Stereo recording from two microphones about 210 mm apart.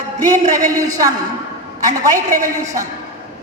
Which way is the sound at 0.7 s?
15° right (ahead or behind).